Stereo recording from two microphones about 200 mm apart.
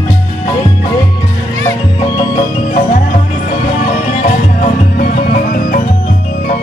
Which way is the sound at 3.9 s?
40° left (ahead or behind).